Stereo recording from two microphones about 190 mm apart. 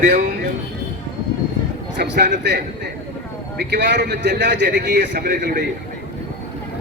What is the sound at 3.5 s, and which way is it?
A man's voice, 65° right (ahead or behind).